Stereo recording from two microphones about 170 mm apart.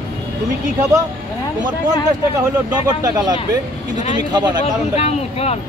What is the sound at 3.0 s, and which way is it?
Speech, 25° right (ahead or behind).